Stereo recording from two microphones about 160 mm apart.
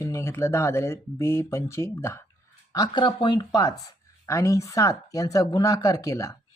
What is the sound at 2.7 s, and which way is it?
Speech, 25° left (ahead or behind).